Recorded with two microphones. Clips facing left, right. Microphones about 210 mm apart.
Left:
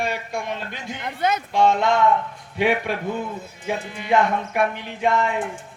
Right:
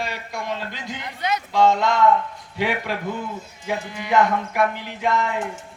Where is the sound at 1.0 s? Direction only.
50° left (ahead or behind).